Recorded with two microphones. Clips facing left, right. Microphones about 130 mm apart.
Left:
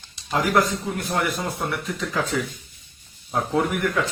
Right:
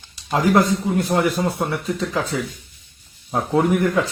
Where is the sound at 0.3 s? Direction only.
25° right (ahead or behind).